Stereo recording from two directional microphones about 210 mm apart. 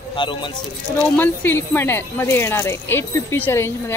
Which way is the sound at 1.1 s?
10° left (ahead or behind).